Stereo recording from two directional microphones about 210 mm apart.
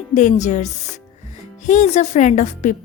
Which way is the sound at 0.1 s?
35° left (ahead or behind).